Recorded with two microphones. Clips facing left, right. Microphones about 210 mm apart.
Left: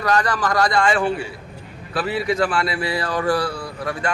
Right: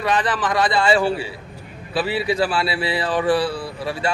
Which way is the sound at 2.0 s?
25° right (ahead or behind).